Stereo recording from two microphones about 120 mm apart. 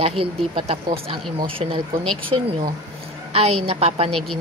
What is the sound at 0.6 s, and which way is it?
A woman's voice, 45° right (ahead or behind).